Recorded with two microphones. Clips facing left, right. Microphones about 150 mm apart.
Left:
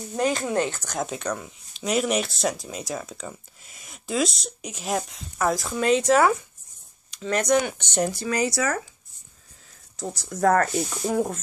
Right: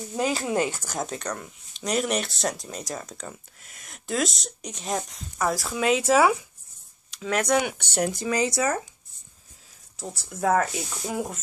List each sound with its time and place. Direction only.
0.1 s a woman's voice: 5° right (ahead or behind)
8.1 s speech: 20° right (ahead or behind)
9.9 s a woman's voice: 5° right (ahead or behind)